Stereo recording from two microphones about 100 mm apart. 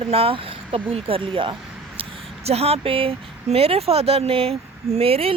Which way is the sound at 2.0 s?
90° right.